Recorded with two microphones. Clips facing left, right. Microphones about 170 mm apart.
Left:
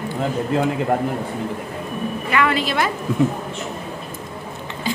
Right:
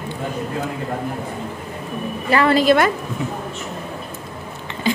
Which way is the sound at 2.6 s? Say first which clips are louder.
Right 7 dB; 55° right (ahead or behind).